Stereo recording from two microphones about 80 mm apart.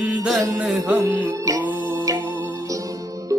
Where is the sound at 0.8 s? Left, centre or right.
Right.